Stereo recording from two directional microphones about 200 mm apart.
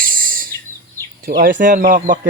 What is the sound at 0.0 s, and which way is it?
Bird, 45° right (ahead or behind).